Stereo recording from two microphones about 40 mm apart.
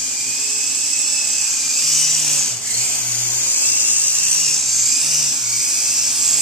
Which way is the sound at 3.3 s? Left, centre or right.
Left.